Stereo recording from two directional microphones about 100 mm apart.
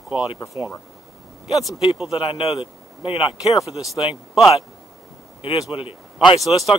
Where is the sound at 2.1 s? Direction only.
85° left; by 3.3 s 65° left (ahead or behind).